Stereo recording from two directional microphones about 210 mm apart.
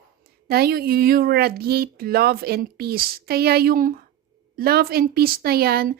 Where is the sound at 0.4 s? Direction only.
45° right (ahead or behind).